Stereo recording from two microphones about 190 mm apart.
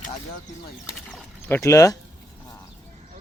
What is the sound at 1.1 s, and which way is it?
Speech, 15° left (ahead or behind).